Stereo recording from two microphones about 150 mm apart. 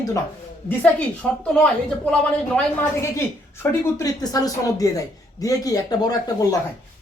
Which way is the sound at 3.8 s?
25° left (ahead or behind).